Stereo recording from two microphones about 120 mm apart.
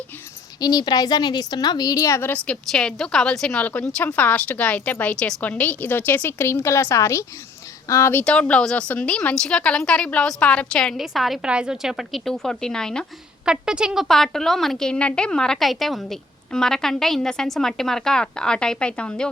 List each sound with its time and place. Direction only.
0.6 s a woman's voice: 35° left (ahead or behind)
8.2 s a woman's voice: 10° left (ahead or behind)
13.4 s a woman's voice: 5° right (ahead or behind)